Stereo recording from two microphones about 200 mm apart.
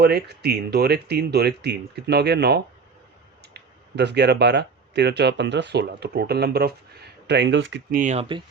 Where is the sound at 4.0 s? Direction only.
55° right (ahead or behind).